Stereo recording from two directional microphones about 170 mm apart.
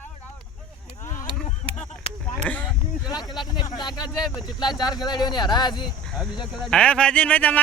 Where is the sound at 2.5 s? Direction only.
10° left (ahead or behind).